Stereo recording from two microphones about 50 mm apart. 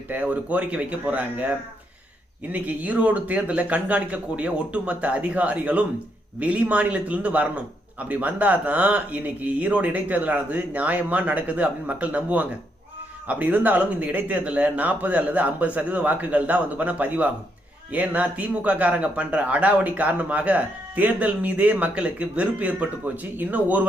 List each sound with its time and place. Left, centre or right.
0.1 s speech: right
2.5 s a man's voice: right